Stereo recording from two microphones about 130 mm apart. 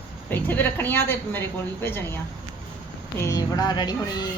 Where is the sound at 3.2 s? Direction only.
25° left (ahead or behind).